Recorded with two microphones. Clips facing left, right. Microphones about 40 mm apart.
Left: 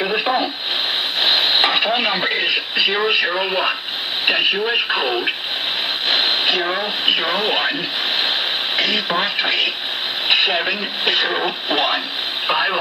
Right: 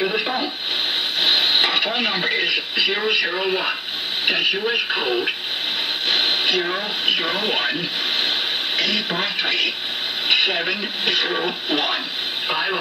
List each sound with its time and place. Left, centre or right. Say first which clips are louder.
0.0 s radio: left 3 dB; centre
1.2 s speech: left 2 dB; left
6.0 s a sound: left 2 dB; left
7.1 s speech: left 3 dB; left
8.2 s radio: left 2 dB; left
10.2 s speech: left 2 dB; left